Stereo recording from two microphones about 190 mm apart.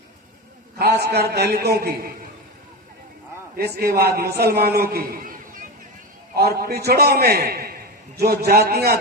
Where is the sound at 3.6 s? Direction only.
55° right (ahead or behind).